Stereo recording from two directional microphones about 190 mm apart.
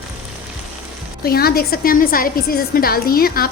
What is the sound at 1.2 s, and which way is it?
A woman's voice, 55° left (ahead or behind).